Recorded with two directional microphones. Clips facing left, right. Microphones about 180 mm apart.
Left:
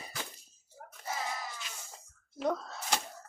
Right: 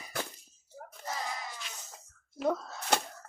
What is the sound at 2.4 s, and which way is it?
Wail, centre (ahead or behind).